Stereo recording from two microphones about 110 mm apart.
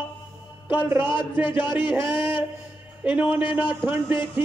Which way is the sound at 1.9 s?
20° right (ahead or behind).